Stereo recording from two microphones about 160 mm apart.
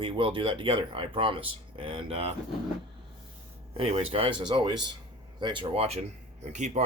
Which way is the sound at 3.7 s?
40° right (ahead or behind).